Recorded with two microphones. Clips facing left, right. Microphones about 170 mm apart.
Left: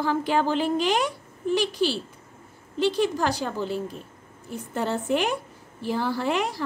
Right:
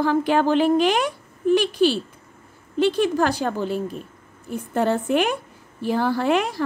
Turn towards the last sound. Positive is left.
turn(degrees=-60)  # may be behind; listen again after turning